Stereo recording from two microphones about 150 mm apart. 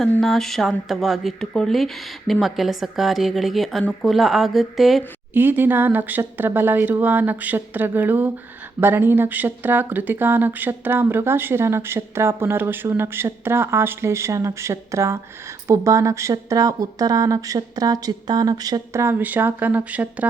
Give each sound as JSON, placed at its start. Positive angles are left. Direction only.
{"t": 0.2, "sound": "speech", "side_deg": 0}
{"t": 5.3, "sound": "speech", "side_deg": -15}